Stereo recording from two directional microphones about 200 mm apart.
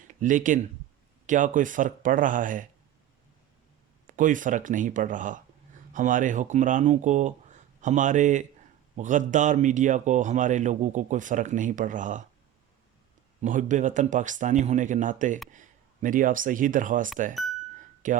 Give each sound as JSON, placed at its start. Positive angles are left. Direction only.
{"t": 0.1, "sound": "a man's voice", "side_deg": -40}
{"t": 4.0, "sound": "a man's voice", "side_deg": -40}
{"t": 13.4, "sound": "a man's voice", "side_deg": -40}